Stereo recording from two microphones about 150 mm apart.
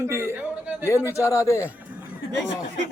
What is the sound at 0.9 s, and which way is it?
Speech, 20° left (ahead or behind).